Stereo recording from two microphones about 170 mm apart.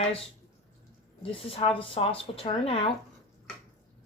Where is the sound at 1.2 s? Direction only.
35° left (ahead or behind).